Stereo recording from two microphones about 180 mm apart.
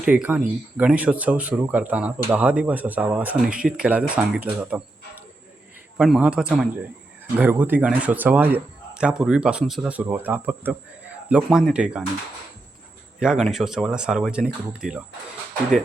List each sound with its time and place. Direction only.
0.0 s speech: 5° right (ahead or behind)
13.1 s speech: 5° right (ahead or behind)